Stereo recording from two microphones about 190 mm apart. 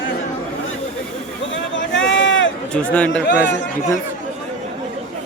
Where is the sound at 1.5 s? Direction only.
75° left (ahead or behind).